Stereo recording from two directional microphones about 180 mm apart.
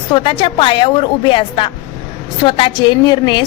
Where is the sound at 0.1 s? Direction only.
30° left (ahead or behind).